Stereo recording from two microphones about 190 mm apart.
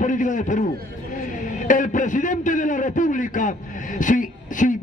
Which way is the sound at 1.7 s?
40° left (ahead or behind).